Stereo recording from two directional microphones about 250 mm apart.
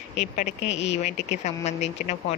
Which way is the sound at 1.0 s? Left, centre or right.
Left.